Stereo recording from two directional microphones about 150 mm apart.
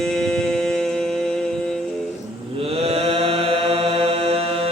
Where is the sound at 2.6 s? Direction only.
40° right (ahead or behind).